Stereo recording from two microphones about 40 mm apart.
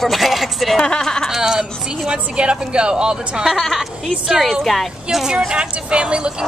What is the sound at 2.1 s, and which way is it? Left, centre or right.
Speech, right.